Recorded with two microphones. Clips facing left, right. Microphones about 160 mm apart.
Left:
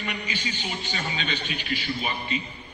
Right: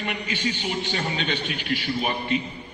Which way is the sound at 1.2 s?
65° right (ahead or behind).